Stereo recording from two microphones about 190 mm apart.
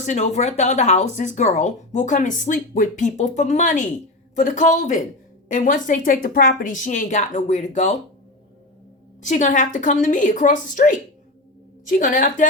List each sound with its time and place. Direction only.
0.0 s speech: 40° left (ahead or behind)
9.2 s speech: 40° left (ahead or behind)